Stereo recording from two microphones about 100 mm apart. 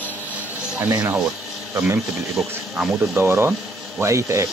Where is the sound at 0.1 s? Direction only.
15° right (ahead or behind).